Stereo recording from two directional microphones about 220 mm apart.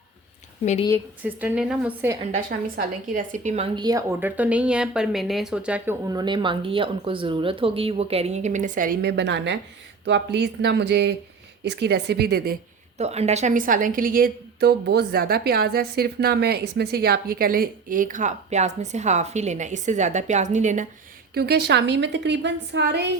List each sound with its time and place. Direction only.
0.6 s speech: 30° left (ahead or behind)
1.2 s a woman's voice: 5° right (ahead or behind)
2.5 s a woman's voice: 40° right (ahead or behind)
13.0 s a woman's voice: 30° right (ahead or behind)
21.3 s a woman's voice: 45° right (ahead or behind)